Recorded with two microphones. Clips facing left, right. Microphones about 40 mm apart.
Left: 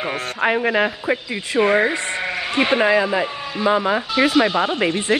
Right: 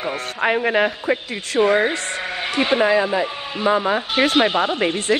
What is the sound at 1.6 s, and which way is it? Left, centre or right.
Speech, left.